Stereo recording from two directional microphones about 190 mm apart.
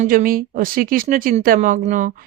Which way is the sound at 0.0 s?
45° right (ahead or behind).